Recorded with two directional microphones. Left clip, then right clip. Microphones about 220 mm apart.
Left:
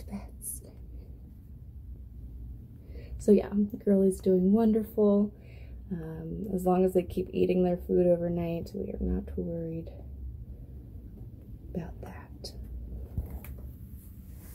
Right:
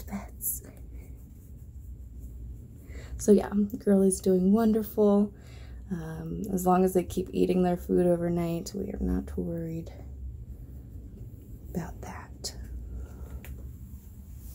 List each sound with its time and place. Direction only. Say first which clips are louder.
3.3 s speech: right 1 dB; 10° right (ahead or behind)
3.7 s a woman's voice: right 1 dB; centre (ahead or behind)
4.0 s speech: right 1 dB; 10° right (ahead or behind)
7.2 s speech: right 1 dB; 10° left (ahead or behind)
7.5 s speech: left 1 dB; 15° right (ahead or behind)